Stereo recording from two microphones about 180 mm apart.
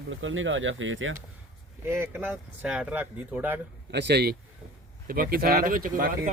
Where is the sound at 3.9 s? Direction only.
70° right (ahead or behind).